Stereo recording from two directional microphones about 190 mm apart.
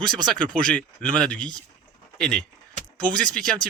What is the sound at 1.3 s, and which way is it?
Speech, 20° right (ahead or behind).